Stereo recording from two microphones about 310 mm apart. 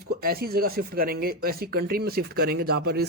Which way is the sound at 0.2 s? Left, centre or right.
Right.